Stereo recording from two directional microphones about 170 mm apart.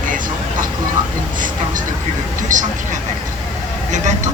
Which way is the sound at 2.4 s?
50° right (ahead or behind).